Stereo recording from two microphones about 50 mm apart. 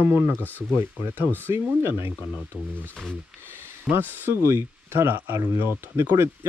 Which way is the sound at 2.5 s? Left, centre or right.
Right.